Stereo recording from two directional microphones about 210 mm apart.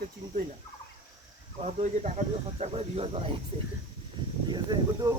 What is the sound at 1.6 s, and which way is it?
Speech, 30° right (ahead or behind).